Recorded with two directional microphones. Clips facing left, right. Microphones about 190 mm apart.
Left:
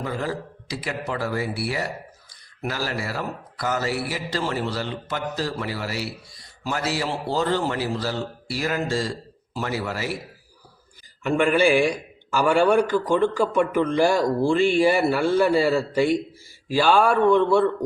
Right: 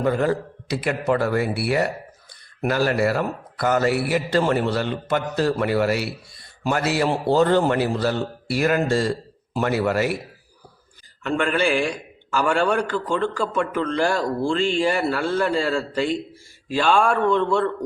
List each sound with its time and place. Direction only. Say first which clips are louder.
0.0 s a man's voice: right 7 dB; 60° right (ahead or behind)
11.2 s a man's voice: left 3 dB; 10° left (ahead or behind)